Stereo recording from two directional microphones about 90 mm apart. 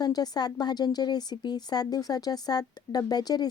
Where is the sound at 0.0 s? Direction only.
50° left (ahead or behind).